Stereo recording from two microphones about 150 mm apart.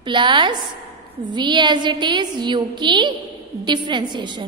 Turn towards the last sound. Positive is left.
turn(degrees=-30)  # may be behind; listen again after turning